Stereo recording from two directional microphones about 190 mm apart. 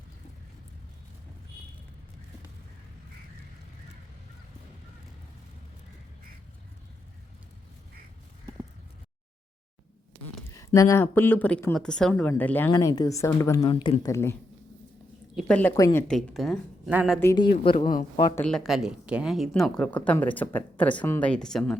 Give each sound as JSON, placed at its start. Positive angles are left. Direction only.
{"t": 10.8, "sound": "speech", "side_deg": 15}
{"t": 15.4, "sound": "speech", "side_deg": 5}
{"t": 17.3, "sound": "speech", "side_deg": 25}
{"t": 18.3, "sound": "speech", "side_deg": 5}